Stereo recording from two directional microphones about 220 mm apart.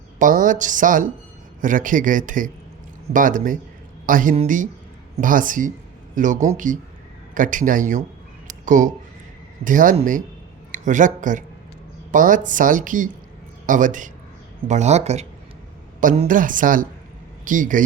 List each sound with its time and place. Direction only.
0.2 s a woman's voice: 35° right (ahead or behind)